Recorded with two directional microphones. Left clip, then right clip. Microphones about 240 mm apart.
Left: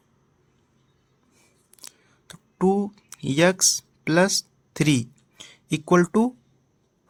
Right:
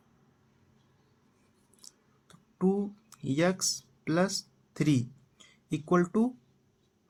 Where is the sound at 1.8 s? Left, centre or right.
Left.